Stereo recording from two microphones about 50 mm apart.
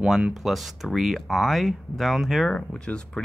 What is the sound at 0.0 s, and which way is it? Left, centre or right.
Speech, centre.